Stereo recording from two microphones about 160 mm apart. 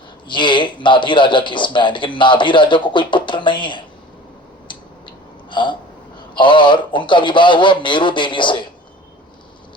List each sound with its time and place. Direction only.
0.3 s speech: 30° left (ahead or behind)
5.5 s hiccup: 30° left (ahead or behind)
6.3 s speech: 30° left (ahead or behind)